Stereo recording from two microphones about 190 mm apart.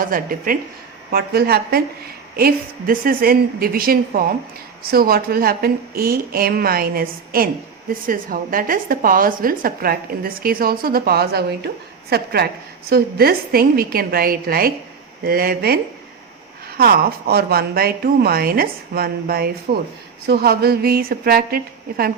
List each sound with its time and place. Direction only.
0.0 s a woman's voice: 45° right (ahead or behind)